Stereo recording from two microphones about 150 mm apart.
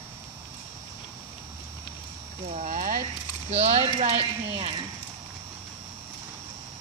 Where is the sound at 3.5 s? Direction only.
45° right (ahead or behind).